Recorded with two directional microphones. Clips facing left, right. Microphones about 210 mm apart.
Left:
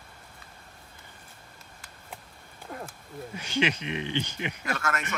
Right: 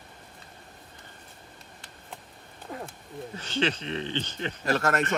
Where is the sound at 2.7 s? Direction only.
Centre (ahead or behind).